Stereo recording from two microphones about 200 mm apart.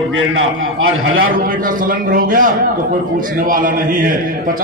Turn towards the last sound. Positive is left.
turn(degrees=-45)  # may be behind; listen again after turning